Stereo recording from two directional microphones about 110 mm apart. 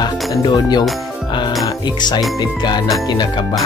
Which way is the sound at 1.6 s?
40° left (ahead or behind).